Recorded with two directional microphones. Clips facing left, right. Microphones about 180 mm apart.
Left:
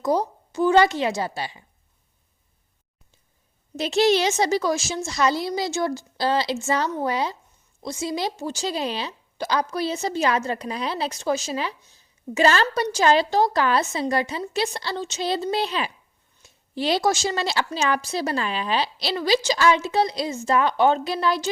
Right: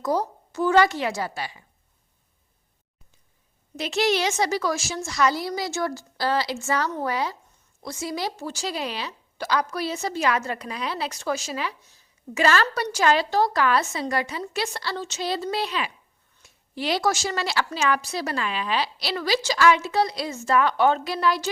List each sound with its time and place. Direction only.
0.0 s a woman's voice: 20° left (ahead or behind)
3.8 s a woman's voice: 25° left (ahead or behind)